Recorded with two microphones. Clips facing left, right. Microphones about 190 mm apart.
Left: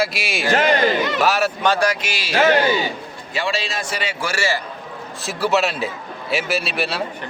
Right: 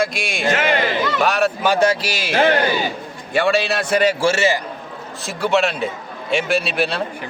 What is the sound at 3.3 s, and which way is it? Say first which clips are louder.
Speech: right 7 dB; 55° right (ahead or behind).